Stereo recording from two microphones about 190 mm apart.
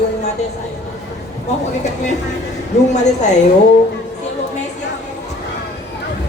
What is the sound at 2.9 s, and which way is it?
Speech, 40° left (ahead or behind).